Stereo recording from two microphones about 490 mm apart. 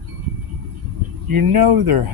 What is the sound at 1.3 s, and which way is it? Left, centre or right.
Speech, right.